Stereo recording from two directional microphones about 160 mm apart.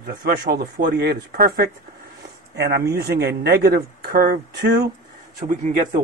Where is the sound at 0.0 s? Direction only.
90° right.